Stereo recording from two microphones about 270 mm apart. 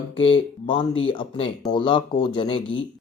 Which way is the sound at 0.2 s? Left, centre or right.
Centre.